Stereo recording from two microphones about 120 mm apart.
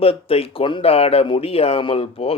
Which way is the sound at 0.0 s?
55° left (ahead or behind).